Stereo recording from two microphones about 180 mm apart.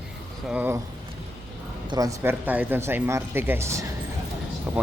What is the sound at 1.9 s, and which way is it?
Speech, 15° right (ahead or behind).